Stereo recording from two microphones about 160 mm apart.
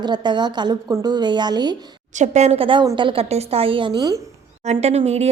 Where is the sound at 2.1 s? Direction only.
45° right (ahead or behind); by 4.2 s 25° right (ahead or behind).